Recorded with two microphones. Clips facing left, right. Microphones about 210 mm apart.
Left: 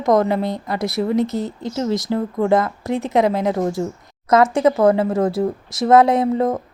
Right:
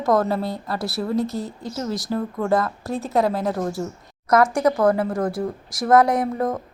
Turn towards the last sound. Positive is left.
turn(degrees=25)  # may be behind; listen again after turning